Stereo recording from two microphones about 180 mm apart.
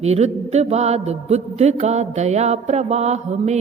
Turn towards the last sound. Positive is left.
turn(degrees=-40)  # may be behind; listen again after turning